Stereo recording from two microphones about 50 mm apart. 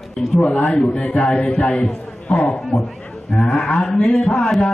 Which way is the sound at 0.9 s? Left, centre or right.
Centre.